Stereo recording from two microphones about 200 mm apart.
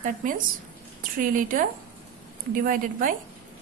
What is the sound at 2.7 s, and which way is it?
Speech, 45° right (ahead or behind).